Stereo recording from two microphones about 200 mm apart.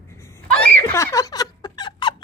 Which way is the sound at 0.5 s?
5° left (ahead or behind).